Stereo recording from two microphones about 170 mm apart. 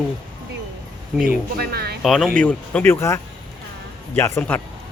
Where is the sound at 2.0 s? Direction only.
Centre (ahead or behind).